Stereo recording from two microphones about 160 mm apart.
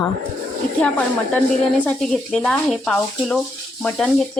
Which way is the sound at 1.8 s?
5° left (ahead or behind).